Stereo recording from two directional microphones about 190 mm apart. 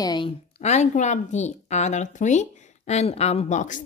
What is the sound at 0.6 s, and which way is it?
A woman's voice, 35° left (ahead or behind).